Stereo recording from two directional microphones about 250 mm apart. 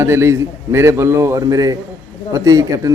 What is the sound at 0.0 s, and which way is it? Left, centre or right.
A man's voice, centre.